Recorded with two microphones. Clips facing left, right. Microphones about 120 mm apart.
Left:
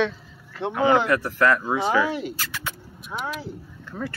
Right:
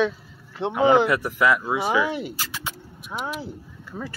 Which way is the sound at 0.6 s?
20° right (ahead or behind).